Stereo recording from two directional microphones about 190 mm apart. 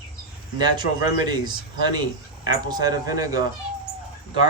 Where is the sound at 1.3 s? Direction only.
20° right (ahead or behind).